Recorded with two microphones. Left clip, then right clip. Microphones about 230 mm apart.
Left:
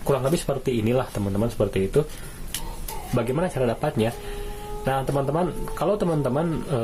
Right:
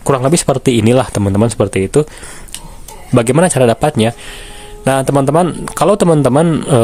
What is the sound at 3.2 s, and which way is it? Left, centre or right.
Speech, right.